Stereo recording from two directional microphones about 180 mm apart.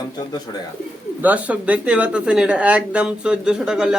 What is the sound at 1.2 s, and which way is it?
Speech, 10° right (ahead or behind).